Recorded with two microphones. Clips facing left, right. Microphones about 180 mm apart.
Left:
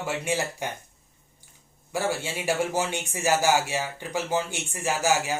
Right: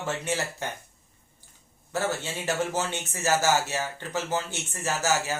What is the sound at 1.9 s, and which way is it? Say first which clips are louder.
Speech: left 1 dB; 10° left (ahead or behind).